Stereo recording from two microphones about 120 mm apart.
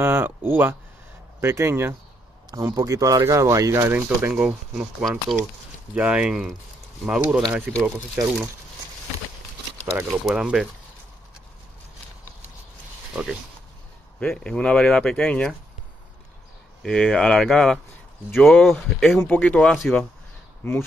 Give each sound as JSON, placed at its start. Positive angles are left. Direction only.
{"t": 0.0, "sound": "speech", "side_deg": -20}
{"t": 10.0, "sound": "speech", "side_deg": -5}
{"t": 13.1, "sound": "speech", "side_deg": -5}
{"t": 14.2, "sound": "speech", "side_deg": 5}
{"t": 16.8, "sound": "speech", "side_deg": 5}
{"t": 20.6, "sound": "speech", "side_deg": 20}